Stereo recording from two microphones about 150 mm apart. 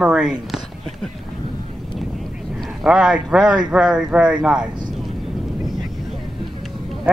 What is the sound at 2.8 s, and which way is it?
Speech, 5° right (ahead or behind).